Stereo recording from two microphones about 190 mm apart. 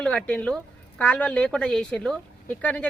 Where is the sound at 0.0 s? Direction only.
5° left (ahead or behind).